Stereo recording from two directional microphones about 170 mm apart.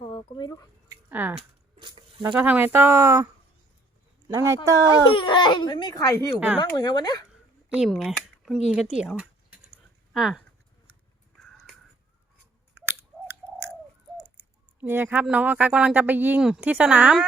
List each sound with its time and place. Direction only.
0.0 s a sound: 25° left (ahead or behind)
0.9 s a sound: 10° right (ahead or behind)
1.4 s coin: 30° right (ahead or behind)
2.2 s speech: 10° right (ahead or behind)
4.3 s speech: 20° right (ahead or behind)
5.1 s speech: 25° left (ahead or behind)
7.8 s speech: centre (ahead or behind)
12.7 s chewing: 15° right (ahead or behind)
14.8 s speech: 10° right (ahead or behind)